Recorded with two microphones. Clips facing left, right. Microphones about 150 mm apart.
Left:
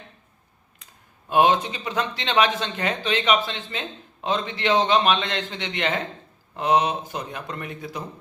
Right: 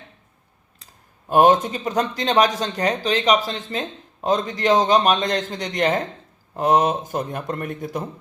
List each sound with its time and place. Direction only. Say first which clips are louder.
1.3 s speech: right 4 dB; 45° right (ahead or behind)